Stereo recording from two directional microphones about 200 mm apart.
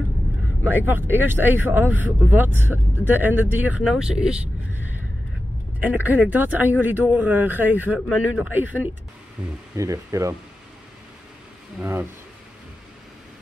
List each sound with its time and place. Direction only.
0.7 s speech: 10° right (ahead or behind)
5.8 s speech: 10° right (ahead or behind)
11.8 s speech: 10° right (ahead or behind)